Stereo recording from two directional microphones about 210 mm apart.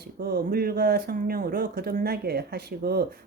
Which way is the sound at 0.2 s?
45° right (ahead or behind).